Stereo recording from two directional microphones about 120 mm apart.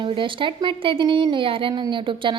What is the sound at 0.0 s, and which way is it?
A woman's voice, 45° right (ahead or behind).